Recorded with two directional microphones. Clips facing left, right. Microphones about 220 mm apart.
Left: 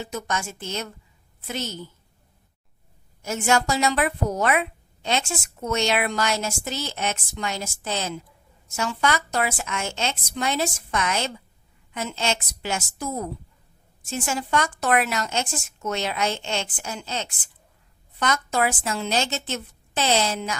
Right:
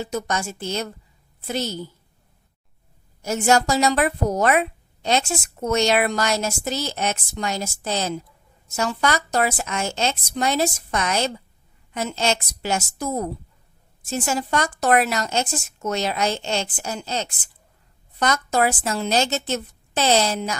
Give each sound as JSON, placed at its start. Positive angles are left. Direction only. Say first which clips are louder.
{"t": 0.0, "sound": "speech", "louder": "right 4 dB", "side_deg": -35}
{"t": 3.2, "sound": "speech", "louder": "right 4 dB", "side_deg": -40}